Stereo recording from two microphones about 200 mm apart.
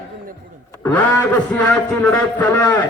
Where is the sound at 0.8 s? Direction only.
10° left (ahead or behind).